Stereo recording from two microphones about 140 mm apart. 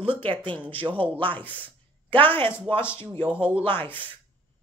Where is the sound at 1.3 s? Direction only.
10° left (ahead or behind).